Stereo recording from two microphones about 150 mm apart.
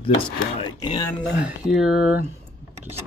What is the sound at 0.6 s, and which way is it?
Speech, 30° left (ahead or behind).